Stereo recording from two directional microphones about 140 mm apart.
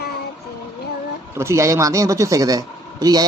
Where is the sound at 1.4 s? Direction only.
20° right (ahead or behind).